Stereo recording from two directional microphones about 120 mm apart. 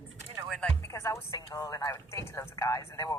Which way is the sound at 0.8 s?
25° left (ahead or behind).